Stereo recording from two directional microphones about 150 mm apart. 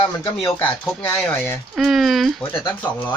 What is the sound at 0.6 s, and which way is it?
Speech, 10° left (ahead or behind).